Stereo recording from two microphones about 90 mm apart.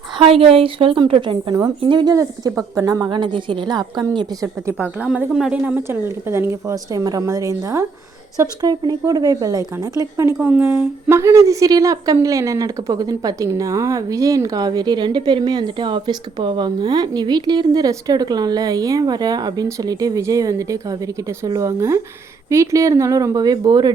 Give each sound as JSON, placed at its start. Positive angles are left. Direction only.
{"t": 0.2, "sound": "a woman's voice", "side_deg": -90}
{"t": 2.6, "sound": "speech", "side_deg": -40}
{"t": 3.1, "sound": "a woman's voice", "side_deg": -60}
{"t": 5.0, "sound": "a woman's voice", "side_deg": -15}
{"t": 5.6, "sound": "speech", "side_deg": -20}
{"t": 8.6, "sound": "a woman's voice", "side_deg": -50}
{"t": 10.4, "sound": "a woman's voice", "side_deg": -20}